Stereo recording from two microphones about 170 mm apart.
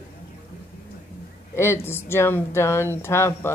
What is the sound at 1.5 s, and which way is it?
Speech, 15° left (ahead or behind).